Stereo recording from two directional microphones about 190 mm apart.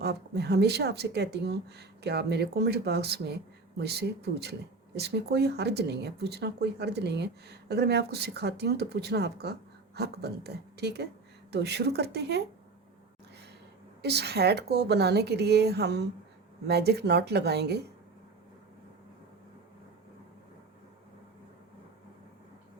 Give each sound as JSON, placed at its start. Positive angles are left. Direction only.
{"t": 0.0, "sound": "speech", "side_deg": -60}
{"t": 14.0, "sound": "speech", "side_deg": -60}